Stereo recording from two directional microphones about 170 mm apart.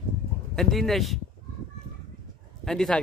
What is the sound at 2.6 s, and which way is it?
Speech, 5° left (ahead or behind).